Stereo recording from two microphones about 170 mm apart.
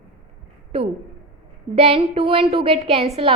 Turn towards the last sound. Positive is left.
turn(degrees=-35)  # may be behind; listen again after turning